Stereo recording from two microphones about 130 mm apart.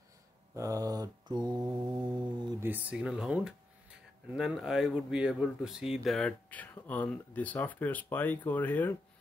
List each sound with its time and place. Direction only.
0.6 s mantra: 25° right (ahead or behind)
2.6 s speech: 10° right (ahead or behind); by 8.9 s 15° left (ahead or behind)